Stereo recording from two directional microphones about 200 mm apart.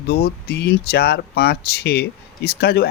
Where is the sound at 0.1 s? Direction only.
50° left (ahead or behind).